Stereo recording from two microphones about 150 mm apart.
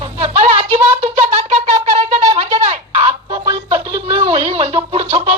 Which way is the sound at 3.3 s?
30° right (ahead or behind).